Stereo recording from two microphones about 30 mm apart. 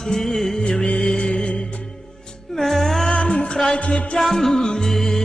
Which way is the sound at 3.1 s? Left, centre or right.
Left.